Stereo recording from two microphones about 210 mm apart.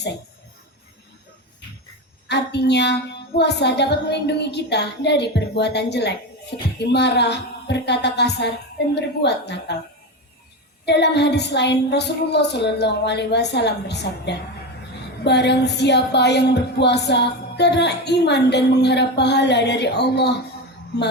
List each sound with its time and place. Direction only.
2.2 s music: 55° left (ahead or behind)
10.8 s music: 55° left (ahead or behind)